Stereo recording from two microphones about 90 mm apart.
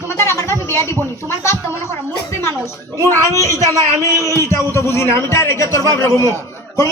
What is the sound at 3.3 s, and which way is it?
A man's voice, 30° left (ahead or behind).